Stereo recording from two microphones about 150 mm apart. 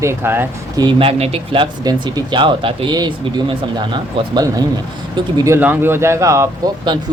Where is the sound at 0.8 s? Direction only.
35° right (ahead or behind).